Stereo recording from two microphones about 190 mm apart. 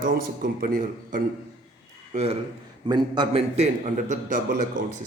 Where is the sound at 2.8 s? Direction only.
25° right (ahead or behind); by 4.5 s 40° right (ahead or behind).